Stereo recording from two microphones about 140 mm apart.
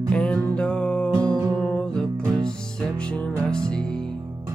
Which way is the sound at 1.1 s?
30° right (ahead or behind).